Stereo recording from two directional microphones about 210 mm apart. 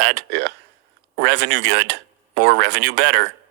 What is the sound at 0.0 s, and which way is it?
Speech, 55° right (ahead or behind).